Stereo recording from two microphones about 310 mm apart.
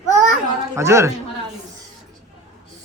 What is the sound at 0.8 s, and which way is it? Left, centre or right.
Speech, centre.